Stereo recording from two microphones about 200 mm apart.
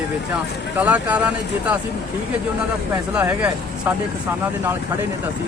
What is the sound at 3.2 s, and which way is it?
Speech, 10° right (ahead or behind).